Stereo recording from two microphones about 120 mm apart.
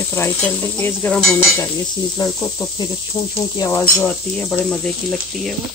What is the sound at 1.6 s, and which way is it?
Sizzle, 25° left (ahead or behind).